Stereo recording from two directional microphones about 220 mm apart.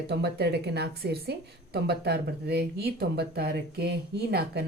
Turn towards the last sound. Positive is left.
turn(degrees=-45)  # may be behind; listen again after turning